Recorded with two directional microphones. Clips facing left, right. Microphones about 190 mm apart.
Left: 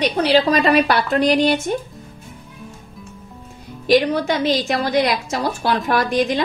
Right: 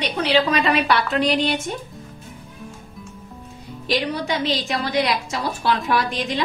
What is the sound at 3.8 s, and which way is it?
A woman's voice, 50° left (ahead or behind).